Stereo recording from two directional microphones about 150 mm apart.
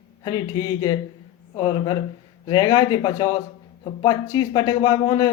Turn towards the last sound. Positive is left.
turn(degrees=25)  # may be behind; listen again after turning